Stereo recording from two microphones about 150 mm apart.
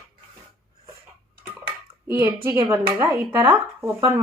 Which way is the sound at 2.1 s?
15° right (ahead or behind).